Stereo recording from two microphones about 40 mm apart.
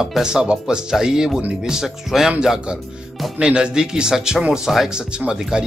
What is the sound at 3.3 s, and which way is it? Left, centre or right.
Speech, right.